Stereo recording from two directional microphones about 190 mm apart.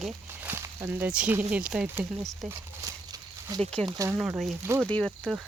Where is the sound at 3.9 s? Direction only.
15° right (ahead or behind).